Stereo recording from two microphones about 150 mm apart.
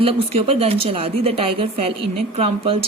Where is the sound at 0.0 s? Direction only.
40° right (ahead or behind).